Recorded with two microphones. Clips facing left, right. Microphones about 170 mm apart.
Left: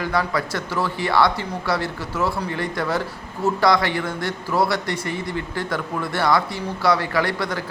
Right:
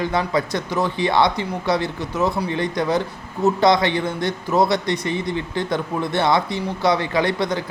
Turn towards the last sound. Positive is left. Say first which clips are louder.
# right 3 dB
turn(degrees=-20)  # may be behind; listen again after turning